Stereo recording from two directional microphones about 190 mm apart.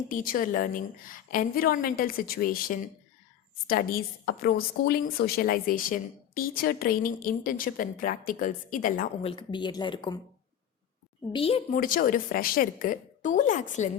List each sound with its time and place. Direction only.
0.1 s a woman's voice: 45° left (ahead or behind)
9.2 s speech: 25° left (ahead or behind)
11.3 s speech: 30° left (ahead or behind)
11.8 s a woman's voice: 45° left (ahead or behind)